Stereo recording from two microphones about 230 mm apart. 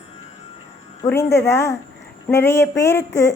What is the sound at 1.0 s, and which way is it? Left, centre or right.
Speech, centre.